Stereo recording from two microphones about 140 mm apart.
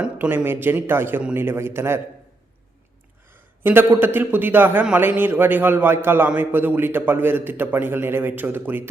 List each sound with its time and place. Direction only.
0.0 s a man's voice: 10° right (ahead or behind)
3.2 s a man's voice: 15° right (ahead or behind)